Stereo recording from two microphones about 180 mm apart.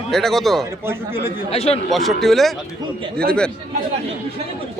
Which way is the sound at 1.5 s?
35° left (ahead or behind).